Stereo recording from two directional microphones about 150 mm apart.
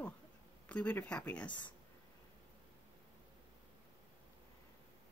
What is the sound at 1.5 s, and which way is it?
Speech, 30° left (ahead or behind).